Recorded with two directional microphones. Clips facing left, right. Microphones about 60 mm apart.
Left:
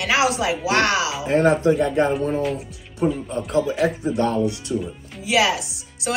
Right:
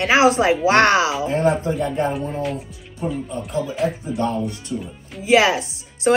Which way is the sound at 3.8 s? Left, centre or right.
Left.